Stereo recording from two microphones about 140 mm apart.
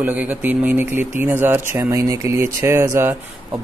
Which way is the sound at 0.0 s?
10° right (ahead or behind).